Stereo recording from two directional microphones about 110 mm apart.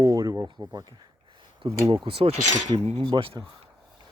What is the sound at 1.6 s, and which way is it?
Speech, 50° right (ahead or behind).